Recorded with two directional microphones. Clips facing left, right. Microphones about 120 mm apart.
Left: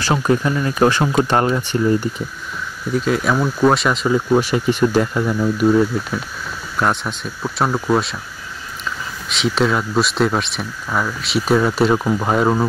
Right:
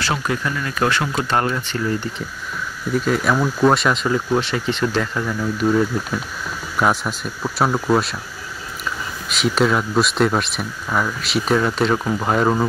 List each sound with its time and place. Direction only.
0.0 s speech: 20° left (ahead or behind)
2.9 s speech: centre (ahead or behind)
9.3 s speech: centre (ahead or behind)